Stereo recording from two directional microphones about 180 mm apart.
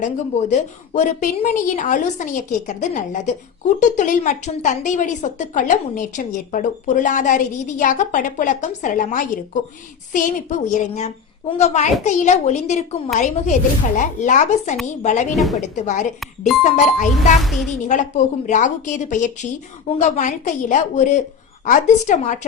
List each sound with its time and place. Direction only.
0.0 s a woman's voice: 40° left (ahead or behind)
17.4 s a woman's voice: centre (ahead or behind)
18.4 s a woman's voice: 45° left (ahead or behind)